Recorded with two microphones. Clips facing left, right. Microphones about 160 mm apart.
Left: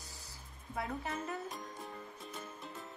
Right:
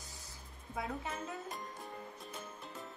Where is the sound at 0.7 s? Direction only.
20° right (ahead or behind).